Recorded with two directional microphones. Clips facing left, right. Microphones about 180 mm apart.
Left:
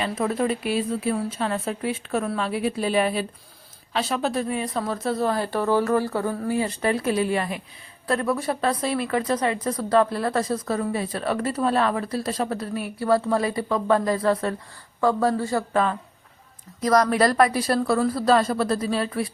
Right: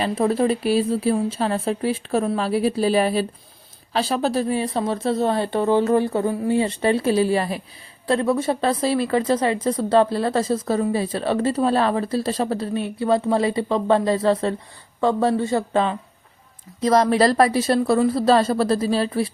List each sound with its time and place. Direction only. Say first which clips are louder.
0.0 s speech: right 4 dB; 35° right (ahead or behind)